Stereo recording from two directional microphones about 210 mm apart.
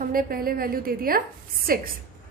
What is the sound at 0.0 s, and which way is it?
A woman's voice, 45° right (ahead or behind).